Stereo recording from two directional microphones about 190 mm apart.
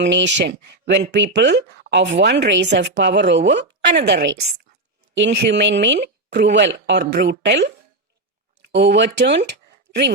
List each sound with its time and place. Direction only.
0.0 s a woman's voice: 70° right (ahead or behind)
8.7 s speech: 65° right (ahead or behind)